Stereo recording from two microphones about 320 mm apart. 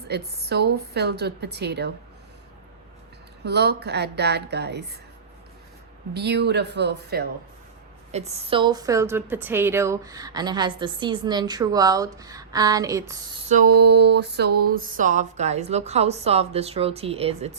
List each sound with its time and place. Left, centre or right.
0.1 s a woman's voice: right
3.4 s a woman's voice: right
6.1 s a woman's voice: right
8.1 s a woman's voice: centre
13.5 s a woman's voice: right